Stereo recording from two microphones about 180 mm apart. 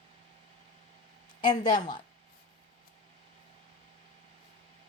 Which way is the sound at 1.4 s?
25° left (ahead or behind).